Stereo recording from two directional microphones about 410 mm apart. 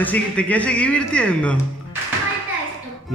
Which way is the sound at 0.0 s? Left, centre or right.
Centre.